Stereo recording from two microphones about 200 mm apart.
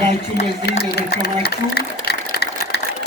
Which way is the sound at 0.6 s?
55° left (ahead or behind).